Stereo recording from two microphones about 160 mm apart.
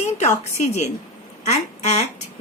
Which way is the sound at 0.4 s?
45° left (ahead or behind).